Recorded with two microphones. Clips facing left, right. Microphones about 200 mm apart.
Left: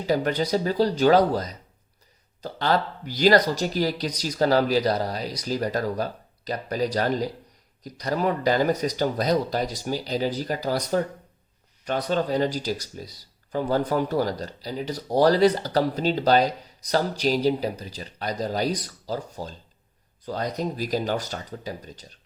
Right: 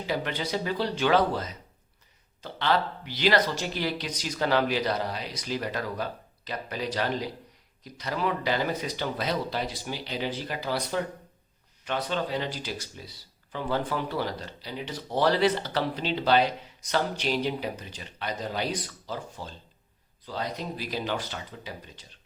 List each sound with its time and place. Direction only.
0.0 s speech: 40° left (ahead or behind)